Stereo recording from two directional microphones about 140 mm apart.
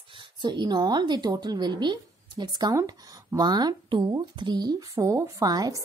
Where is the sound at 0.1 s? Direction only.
35° right (ahead or behind).